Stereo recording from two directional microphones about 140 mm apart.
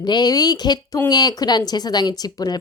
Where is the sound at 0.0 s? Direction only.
30° left (ahead or behind).